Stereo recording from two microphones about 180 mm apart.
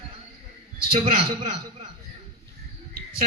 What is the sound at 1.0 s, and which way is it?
Speech, 35° right (ahead or behind).